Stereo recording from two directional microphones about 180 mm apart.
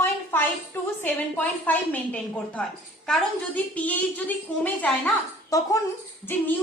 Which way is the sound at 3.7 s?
10° left (ahead or behind).